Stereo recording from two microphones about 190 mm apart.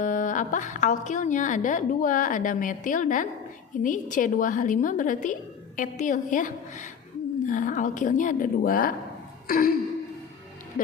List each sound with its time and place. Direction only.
0.0 s a woman's voice: 40° left (ahead or behind)